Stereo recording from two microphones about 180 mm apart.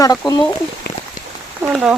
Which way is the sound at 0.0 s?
20° left (ahead or behind).